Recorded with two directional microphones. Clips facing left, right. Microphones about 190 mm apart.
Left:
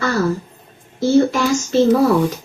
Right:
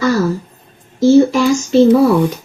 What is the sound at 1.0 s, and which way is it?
Speech, 5° right (ahead or behind).